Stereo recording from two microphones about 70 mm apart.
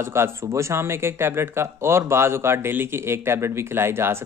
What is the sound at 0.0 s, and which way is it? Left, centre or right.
Speech, right.